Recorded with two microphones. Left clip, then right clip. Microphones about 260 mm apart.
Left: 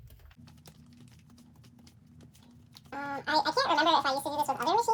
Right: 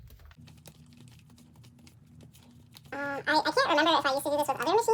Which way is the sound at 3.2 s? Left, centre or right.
Centre.